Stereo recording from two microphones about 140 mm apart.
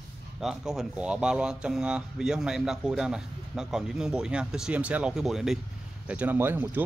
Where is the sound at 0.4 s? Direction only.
5° right (ahead or behind).